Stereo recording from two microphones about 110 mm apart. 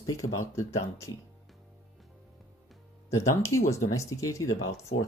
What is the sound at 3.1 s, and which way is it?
Speech, 25° left (ahead or behind).